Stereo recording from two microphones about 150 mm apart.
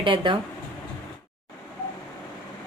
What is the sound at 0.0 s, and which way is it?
Speech, 35° right (ahead or behind).